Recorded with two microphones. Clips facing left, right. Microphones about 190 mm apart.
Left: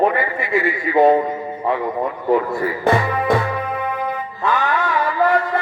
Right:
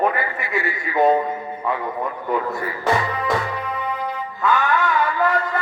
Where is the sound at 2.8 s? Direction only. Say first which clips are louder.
Left 3 dB; 55° left (ahead or behind).